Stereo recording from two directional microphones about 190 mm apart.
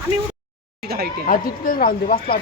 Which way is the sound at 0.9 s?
55° right (ahead or behind).